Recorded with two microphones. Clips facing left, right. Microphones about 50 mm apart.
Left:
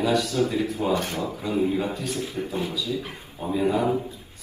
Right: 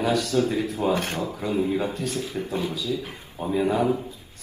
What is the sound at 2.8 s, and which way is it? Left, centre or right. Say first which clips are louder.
Speech: right 1 dB; left.